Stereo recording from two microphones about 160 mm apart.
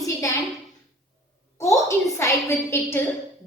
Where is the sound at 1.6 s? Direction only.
20° left (ahead or behind).